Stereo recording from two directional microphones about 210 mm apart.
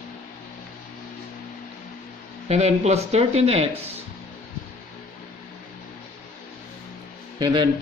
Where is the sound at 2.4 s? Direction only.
30° right (ahead or behind).